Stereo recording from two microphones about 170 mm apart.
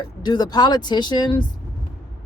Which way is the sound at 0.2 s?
25° left (ahead or behind).